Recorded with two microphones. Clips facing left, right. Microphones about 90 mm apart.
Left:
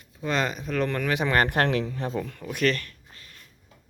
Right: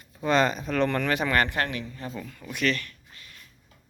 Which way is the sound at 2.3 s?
50° left (ahead or behind).